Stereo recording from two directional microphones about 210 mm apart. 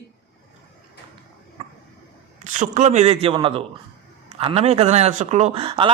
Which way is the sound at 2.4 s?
35° right (ahead or behind).